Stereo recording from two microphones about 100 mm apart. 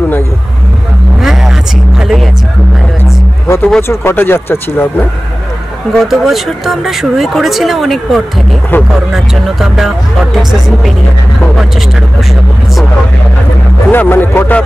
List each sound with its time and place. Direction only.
1.2 s a sound: 5° right (ahead or behind)
2.0 s speech: centre (ahead or behind)
3.4 s speech: 25° left (ahead or behind)
5.9 s speech: centre (ahead or behind)
8.7 s speech: 20° left (ahead or behind)
9.1 s speech: 5° right (ahead or behind)
13.9 s speech: 20° left (ahead or behind)